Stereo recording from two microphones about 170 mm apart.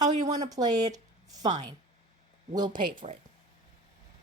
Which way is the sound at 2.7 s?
50° right (ahead or behind).